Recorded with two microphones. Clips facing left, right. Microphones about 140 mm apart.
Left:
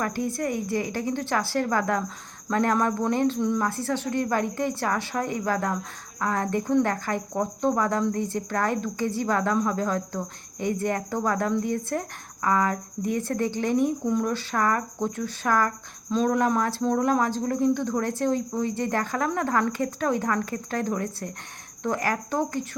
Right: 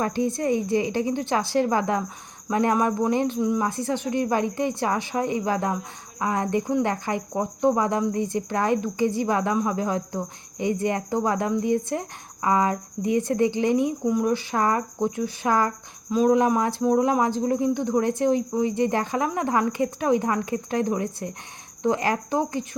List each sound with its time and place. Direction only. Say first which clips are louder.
0.0 s a woman's voice: right 3 dB; 20° right (ahead or behind)